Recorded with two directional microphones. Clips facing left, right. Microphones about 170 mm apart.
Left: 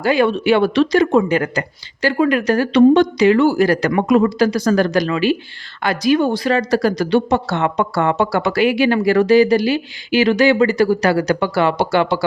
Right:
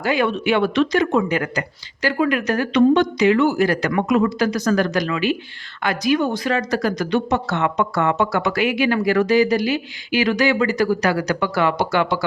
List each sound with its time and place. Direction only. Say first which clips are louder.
0.0 s a woman's voice: left 4 dB; 35° left (ahead or behind)